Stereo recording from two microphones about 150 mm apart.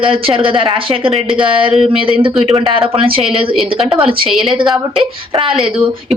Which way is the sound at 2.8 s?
35° right (ahead or behind).